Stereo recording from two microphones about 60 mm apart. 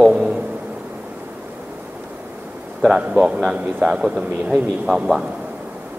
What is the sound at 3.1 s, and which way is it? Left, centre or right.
A man's voice, centre.